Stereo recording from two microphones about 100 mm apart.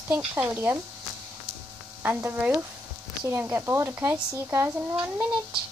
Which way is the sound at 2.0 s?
20° right (ahead or behind).